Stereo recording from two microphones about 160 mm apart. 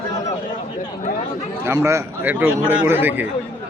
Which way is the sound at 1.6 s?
15° right (ahead or behind).